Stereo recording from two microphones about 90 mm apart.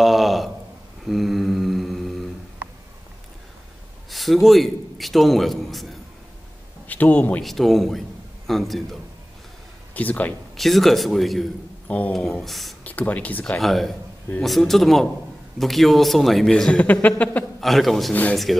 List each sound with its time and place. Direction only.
0.0 s a sound: centre (ahead or behind)
1.0 s mantra: centre (ahead or behind)
4.1 s a man's voice: centre (ahead or behind)
6.9 s speech: 20° left (ahead or behind)
7.4 s a man's voice: centre (ahead or behind)
9.9 s speech: 15° left (ahead or behind)
10.5 s a man's voice: centre (ahead or behind)
12.8 s speech: 15° left (ahead or behind)
13.6 s a man's voice: centre (ahead or behind)
16.8 s speech: 15° left (ahead or behind)
17.6 s a man's voice: centre (ahead or behind)